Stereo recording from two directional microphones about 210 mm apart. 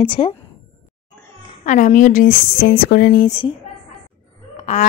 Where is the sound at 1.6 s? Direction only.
35° left (ahead or behind).